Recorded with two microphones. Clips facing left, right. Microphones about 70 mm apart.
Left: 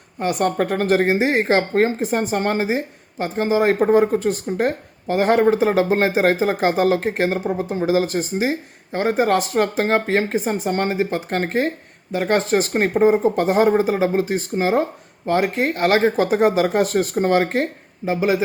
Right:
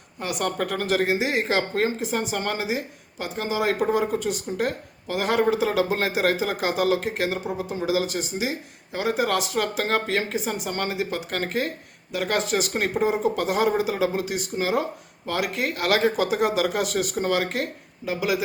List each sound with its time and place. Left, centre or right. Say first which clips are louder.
0.2 s speech: left 7 dB; left